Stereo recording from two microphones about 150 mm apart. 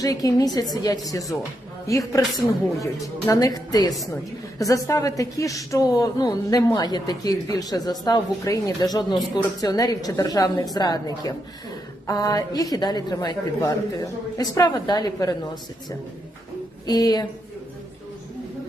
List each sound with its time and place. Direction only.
0.0 s a woman's voice: 25° left (ahead or behind)
16.8 s a woman's voice: 25° left (ahead or behind)